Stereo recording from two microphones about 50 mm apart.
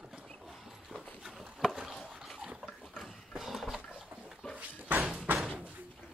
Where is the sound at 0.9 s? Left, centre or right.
Centre.